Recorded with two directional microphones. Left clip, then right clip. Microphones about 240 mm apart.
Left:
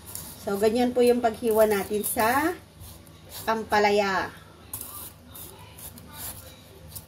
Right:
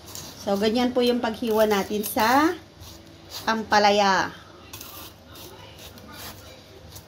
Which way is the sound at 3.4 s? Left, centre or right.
Right.